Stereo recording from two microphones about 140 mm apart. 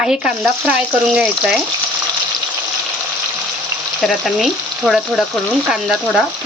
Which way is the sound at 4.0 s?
Centre (ahead or behind).